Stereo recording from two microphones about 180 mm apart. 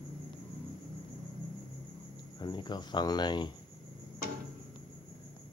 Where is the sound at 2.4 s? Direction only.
25° left (ahead or behind).